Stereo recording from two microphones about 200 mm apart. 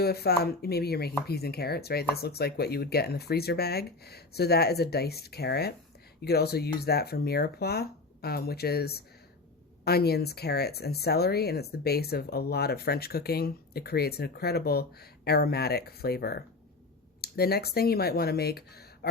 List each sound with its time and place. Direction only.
0.0 s speech: 50° left (ahead or behind)